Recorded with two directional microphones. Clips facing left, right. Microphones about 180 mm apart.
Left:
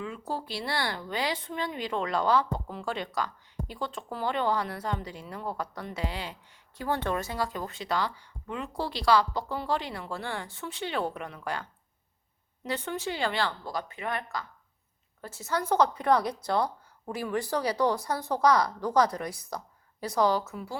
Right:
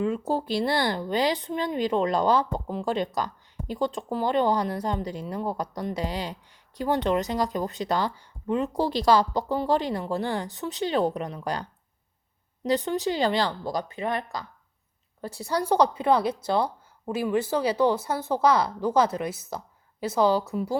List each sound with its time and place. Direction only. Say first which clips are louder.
0.6 s speech: right 6 dB; 45° right (ahead or behind)
0.9 s a woman's voice: right 7 dB; 25° right (ahead or behind)
1.1 s speech: right 7 dB; 40° right (ahead or behind)
6.7 s speech: right 6 dB; 15° right (ahead or behind)
7.5 s a woman's voice: right 5 dB; 40° right (ahead or behind); by 18.2 s 25° right (ahead or behind)
18.2 s a woman's voice: right 4 dB; 5° right (ahead or behind)
18.4 s a woman's voice: right 2 dB; 25° right (ahead or behind)